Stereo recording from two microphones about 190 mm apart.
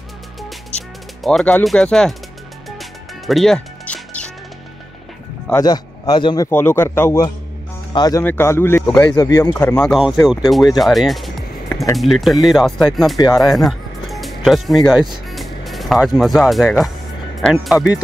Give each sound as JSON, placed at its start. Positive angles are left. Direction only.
{"t": 0.4, "sound": "music", "side_deg": 5}
{"t": 5.5, "sound": "speech", "side_deg": 20}
{"t": 9.8, "sound": "speech", "side_deg": 0}
{"t": 13.2, "sound": "speech", "side_deg": 20}
{"t": 13.5, "sound": "speech", "side_deg": 0}